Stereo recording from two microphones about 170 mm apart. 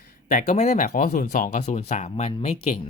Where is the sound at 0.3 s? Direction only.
45° left (ahead or behind).